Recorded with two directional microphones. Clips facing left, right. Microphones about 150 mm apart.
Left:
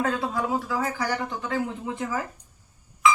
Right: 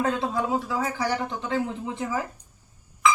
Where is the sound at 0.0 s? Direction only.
20° right (ahead or behind).